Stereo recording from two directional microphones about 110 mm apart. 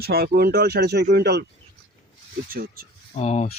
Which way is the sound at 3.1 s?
80° left.